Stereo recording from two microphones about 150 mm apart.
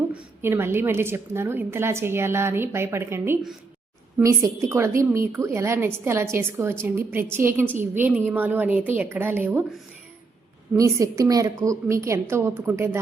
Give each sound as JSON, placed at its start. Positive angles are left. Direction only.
{"t": 0.1, "sound": "a woman's voice", "side_deg": -15}
{"t": 10.8, "sound": "a woman's voice", "side_deg": -20}